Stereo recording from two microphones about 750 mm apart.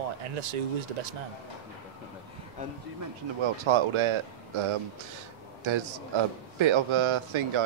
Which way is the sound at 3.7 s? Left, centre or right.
Right.